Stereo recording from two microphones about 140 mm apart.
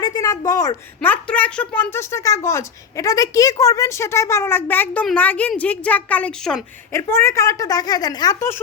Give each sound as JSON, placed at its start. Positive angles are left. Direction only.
{"t": 0.0, "sound": "a sound", "side_deg": 30}
{"t": 1.0, "sound": "a child's voice", "side_deg": 10}
{"t": 6.9, "sound": "speech", "side_deg": 20}